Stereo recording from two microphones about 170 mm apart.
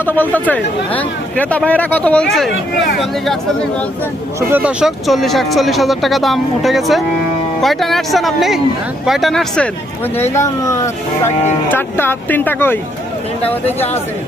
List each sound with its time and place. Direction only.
0.0 s speech: 10° left (ahead or behind)
4.4 s speech: 10° right (ahead or behind)
10.3 s speech: 20° left (ahead or behind)